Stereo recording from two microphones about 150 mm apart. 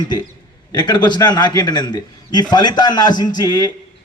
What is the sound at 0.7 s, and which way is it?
A man's voice, 30° left (ahead or behind).